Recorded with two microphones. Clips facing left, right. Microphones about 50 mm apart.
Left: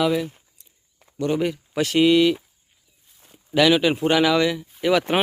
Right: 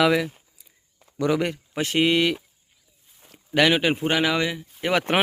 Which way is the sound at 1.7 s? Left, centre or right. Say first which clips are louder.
Left 4 dB; right.